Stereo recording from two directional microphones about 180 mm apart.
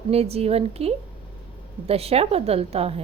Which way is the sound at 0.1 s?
35° right (ahead or behind).